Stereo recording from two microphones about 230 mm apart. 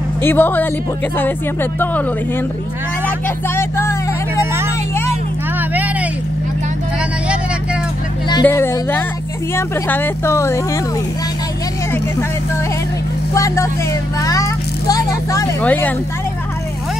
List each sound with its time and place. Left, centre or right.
0.2 s speech: centre
3.4 s speech: centre
5.6 s vehicle: centre
8.3 s speech: centre
13.3 s speech: centre
14.2 s vehicle: centre